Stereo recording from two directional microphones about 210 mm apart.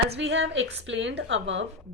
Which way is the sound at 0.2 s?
60° right (ahead or behind).